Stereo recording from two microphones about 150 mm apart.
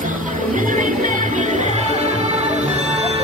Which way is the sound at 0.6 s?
60° right (ahead or behind).